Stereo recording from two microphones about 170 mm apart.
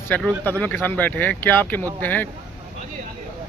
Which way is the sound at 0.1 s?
10° left (ahead or behind).